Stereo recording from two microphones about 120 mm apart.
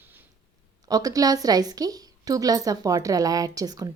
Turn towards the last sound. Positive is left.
turn(degrees=-30)  # may be behind; listen again after turning